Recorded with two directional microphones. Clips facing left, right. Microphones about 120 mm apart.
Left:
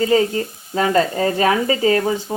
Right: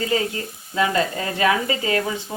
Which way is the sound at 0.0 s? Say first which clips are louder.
Left 7 dB; 30° left (ahead or behind).